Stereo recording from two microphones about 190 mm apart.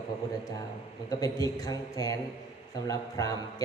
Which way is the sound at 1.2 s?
20° left (ahead or behind).